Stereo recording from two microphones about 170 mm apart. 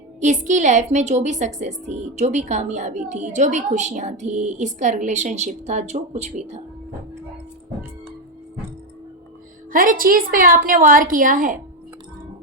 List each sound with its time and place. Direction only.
0.2 s a woman's voice: 45° right (ahead or behind)
9.7 s a woman's voice: 55° right (ahead or behind)